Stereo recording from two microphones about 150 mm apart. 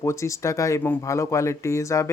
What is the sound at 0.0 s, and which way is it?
Speech, 20° left (ahead or behind).